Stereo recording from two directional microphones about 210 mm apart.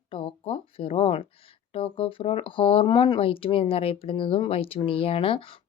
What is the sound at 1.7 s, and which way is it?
Speech, 25° left (ahead or behind).